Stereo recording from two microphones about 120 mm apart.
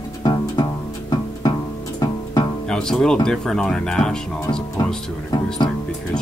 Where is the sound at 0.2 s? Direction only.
40° left (ahead or behind).